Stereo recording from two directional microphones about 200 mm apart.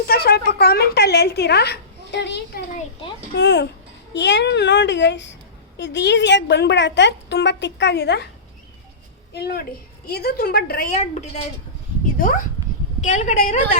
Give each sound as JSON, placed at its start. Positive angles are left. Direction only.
{"t": 0.1, "sound": "a woman's voice", "side_deg": 50}
{"t": 9.3, "sound": "a woman's voice", "side_deg": 55}
{"t": 10.9, "sound": "a woman's voice", "side_deg": 35}
{"t": 13.0, "sound": "a woman's voice", "side_deg": 35}